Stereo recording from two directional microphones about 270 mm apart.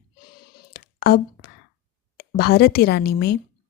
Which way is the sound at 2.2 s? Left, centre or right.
Left.